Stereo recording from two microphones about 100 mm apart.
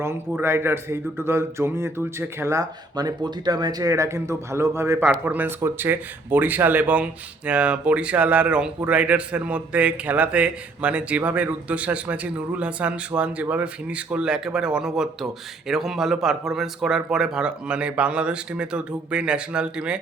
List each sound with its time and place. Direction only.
0.3 s speech: 25° right (ahead or behind)
2.6 s speech: 40° right (ahead or behind); by 20.0 s 10° right (ahead or behind)